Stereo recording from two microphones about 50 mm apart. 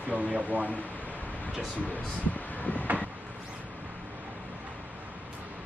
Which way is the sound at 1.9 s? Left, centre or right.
Left.